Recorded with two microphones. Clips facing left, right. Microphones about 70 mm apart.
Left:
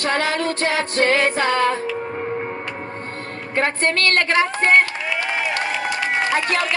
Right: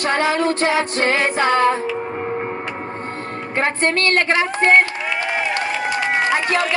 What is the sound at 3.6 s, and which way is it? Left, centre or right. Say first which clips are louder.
Music: right 1 dB; right.